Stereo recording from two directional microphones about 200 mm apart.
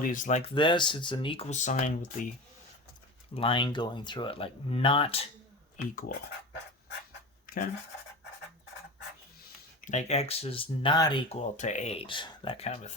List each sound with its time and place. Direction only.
0.0 s speech: 40° left (ahead or behind)
0.5 s speech: 25° left (ahead or behind)
3.3 s speech: 25° left (ahead or behind)
5.7 s speech: 45° left (ahead or behind)
7.5 s scratch: 45° left (ahead or behind)
9.8 s speech: 35° left (ahead or behind)
11.3 s speech: 35° left (ahead or behind)